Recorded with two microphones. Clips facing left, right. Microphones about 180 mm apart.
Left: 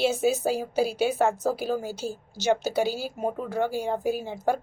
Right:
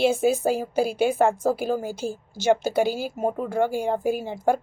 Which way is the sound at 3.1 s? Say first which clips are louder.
Right 4 dB; 5° right (ahead or behind).